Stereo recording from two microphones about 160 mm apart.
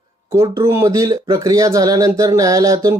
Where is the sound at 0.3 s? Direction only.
15° right (ahead or behind).